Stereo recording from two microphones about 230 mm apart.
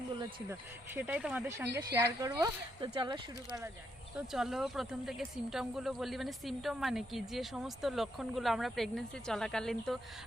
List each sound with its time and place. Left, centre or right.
0.9 s speech: centre
4.3 s speech: centre